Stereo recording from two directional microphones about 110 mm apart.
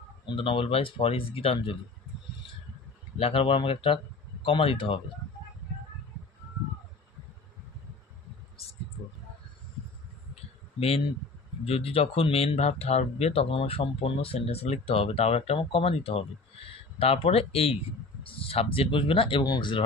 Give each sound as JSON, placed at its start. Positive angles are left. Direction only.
{"t": 0.2, "sound": "speech", "side_deg": 50}
{"t": 3.2, "sound": "speech", "side_deg": 60}
{"t": 11.6, "sound": "speech", "side_deg": 60}
{"t": 19.4, "sound": "speech", "side_deg": 35}